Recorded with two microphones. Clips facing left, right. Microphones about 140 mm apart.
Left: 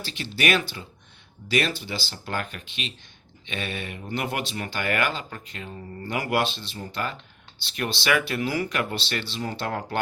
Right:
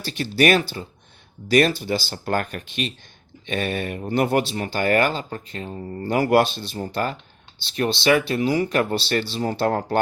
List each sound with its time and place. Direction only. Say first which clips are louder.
0.0 s speech: right 7 dB; 45° right (ahead or behind)
8.3 s speech: right 6 dB; 25° right (ahead or behind); by 10.0 s 40° right (ahead or behind)